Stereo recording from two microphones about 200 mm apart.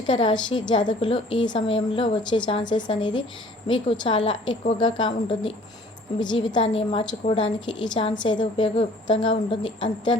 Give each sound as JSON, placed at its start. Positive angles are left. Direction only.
{"t": 0.1, "sound": "a woman's voice", "side_deg": 25}